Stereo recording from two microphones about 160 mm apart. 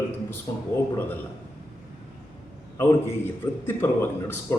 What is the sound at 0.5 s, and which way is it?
Speech, 25° left (ahead or behind).